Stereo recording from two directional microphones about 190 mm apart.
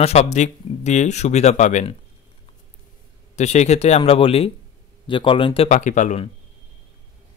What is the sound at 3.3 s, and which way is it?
A man's voice, 35° left (ahead or behind).